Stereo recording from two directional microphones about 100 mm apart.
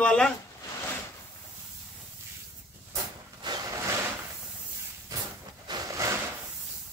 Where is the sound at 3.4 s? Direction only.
45° right (ahead or behind).